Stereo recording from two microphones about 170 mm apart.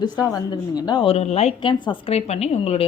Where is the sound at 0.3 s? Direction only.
20° left (ahead or behind).